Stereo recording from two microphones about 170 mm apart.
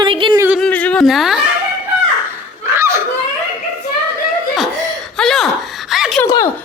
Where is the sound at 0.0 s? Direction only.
30° right (ahead or behind).